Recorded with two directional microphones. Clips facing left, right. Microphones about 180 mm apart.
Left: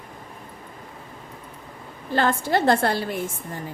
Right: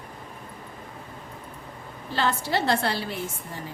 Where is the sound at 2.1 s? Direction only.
50° left (ahead or behind).